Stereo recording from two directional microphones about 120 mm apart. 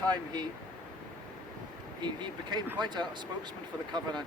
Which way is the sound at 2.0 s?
40° right (ahead or behind).